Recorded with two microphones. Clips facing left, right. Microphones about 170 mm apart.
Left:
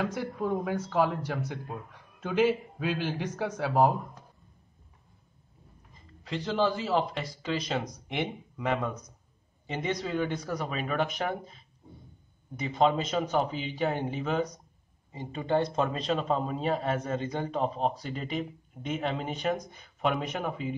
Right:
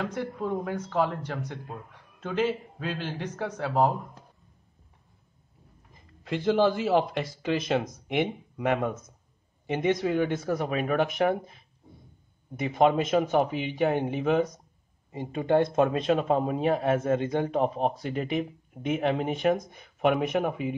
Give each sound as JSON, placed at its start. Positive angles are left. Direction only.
{"t": 0.0, "sound": "speech", "side_deg": 5}
{"t": 5.9, "sound": "a man's voice", "side_deg": -55}